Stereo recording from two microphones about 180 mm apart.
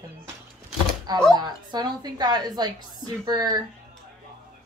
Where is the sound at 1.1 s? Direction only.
20° right (ahead or behind).